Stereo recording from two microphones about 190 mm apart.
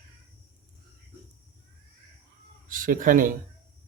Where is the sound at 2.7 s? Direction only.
45° right (ahead or behind).